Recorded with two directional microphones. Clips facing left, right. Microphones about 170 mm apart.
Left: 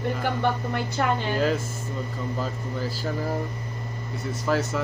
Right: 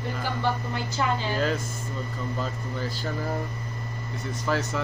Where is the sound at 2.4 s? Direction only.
5° left (ahead or behind).